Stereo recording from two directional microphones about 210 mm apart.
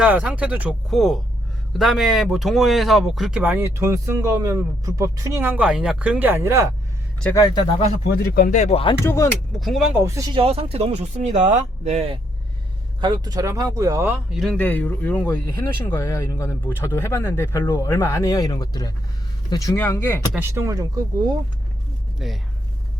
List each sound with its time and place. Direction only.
0.0 s speech: 5° right (ahead or behind)
7.2 s speech: 10° left (ahead or behind)
8.1 s speech: 45° left (ahead or behind); by 9.0 s 25° left (ahead or behind)
9.0 s speech: 15° left (ahead or behind)
9.6 s speech: centre (ahead or behind)
10.2 s speech: 20° right (ahead or behind)
14.4 s speech: 5° left (ahead or behind)
20.3 s speech: 10° right (ahead or behind)
22.2 s speech: centre (ahead or behind)